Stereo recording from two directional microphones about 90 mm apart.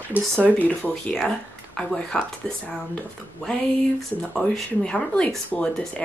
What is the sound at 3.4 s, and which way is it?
Speech, 5° left (ahead or behind).